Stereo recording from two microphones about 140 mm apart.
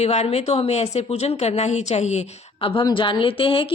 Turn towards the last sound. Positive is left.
turn(degrees=40)  # may be behind; listen again after turning